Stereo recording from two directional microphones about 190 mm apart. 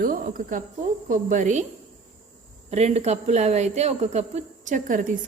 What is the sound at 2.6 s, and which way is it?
Speech, 35° right (ahead or behind).